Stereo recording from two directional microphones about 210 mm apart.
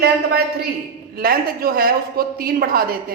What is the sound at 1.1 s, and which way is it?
A woman's voice, 45° right (ahead or behind).